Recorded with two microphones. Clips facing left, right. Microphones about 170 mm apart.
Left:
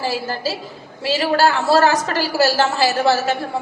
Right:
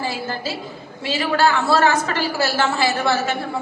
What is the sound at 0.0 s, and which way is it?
A woman's voice, 40° left (ahead or behind).